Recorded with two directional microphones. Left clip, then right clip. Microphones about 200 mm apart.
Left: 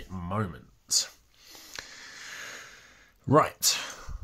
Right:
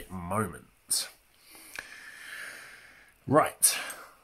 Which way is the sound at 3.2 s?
20° left (ahead or behind).